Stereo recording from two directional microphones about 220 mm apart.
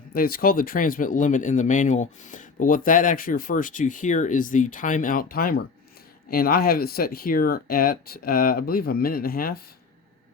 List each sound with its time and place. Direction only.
0.1 s speech: 45° left (ahead or behind)